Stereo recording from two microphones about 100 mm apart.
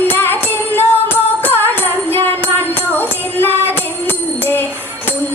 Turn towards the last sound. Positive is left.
turn(degrees=20)  # may be behind; listen again after turning